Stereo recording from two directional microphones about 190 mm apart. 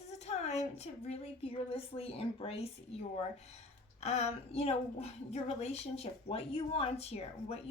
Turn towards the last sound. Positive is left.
turn(degrees=35)  # may be behind; listen again after turning